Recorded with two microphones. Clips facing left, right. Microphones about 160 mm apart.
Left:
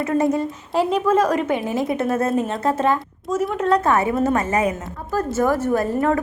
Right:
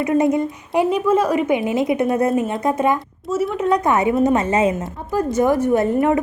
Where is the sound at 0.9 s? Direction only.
10° right (ahead or behind).